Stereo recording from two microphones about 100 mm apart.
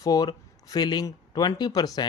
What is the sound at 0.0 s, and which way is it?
Speech, 40° left (ahead or behind).